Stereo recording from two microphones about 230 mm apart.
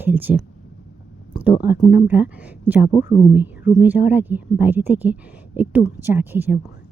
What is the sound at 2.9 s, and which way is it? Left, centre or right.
Speech, left.